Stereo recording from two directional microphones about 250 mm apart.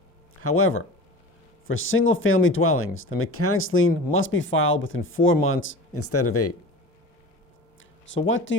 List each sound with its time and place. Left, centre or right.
0.4 s speech: left
8.0 s speech: left